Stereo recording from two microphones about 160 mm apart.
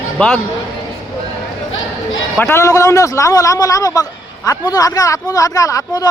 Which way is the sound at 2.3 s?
15° left (ahead or behind).